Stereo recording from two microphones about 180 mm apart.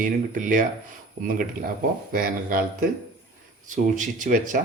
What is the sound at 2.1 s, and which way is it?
Speech, 50° right (ahead or behind).